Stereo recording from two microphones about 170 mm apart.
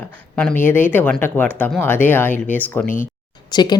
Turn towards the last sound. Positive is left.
turn(degrees=25)  # may be behind; listen again after turning